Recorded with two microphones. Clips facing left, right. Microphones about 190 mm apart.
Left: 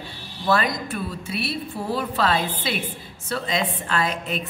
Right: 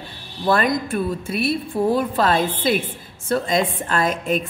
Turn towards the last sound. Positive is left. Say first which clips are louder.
# right 5 dB
turn(degrees=-45)  # may be behind; listen again after turning